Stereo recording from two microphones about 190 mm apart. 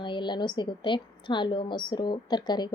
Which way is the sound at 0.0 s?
25° left (ahead or behind).